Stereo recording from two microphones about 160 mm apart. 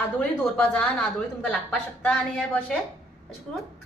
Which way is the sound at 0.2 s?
5° left (ahead or behind).